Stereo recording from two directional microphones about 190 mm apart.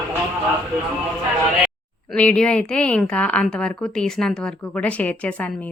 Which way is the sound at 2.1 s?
5° left (ahead or behind).